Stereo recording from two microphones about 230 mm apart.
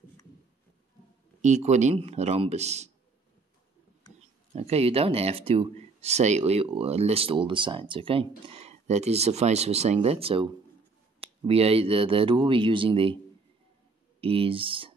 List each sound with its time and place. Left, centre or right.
1.4 s speech: right
4.6 s speech: right
14.2 s speech: right